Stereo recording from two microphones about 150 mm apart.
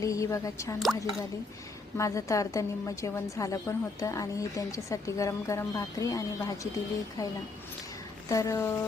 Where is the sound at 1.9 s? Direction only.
20° left (ahead or behind).